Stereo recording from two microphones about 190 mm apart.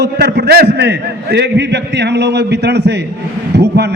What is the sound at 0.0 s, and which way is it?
A man's voice, 55° right (ahead or behind).